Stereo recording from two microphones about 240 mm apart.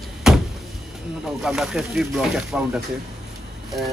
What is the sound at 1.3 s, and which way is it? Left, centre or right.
Speech, centre.